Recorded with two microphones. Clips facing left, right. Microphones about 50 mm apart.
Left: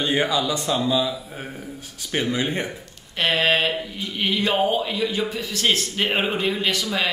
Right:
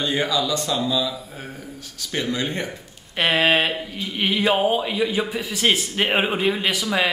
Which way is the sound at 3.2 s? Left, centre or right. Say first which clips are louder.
Right 2 dB; centre.